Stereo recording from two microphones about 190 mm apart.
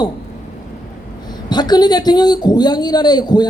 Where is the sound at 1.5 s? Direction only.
20° left (ahead or behind).